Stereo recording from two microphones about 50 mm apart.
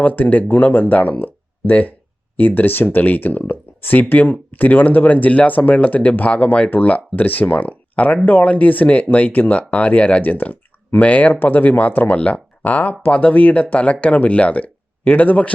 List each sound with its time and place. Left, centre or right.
0.0 s speech: left